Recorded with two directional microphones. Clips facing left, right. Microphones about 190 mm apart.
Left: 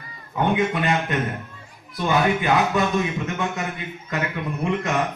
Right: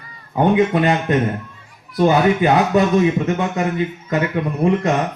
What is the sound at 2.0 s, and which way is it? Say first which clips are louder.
A man's voice: right 7 dB; 35° right (ahead or behind).